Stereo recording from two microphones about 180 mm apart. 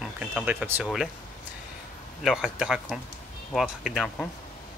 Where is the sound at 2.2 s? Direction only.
5° right (ahead or behind).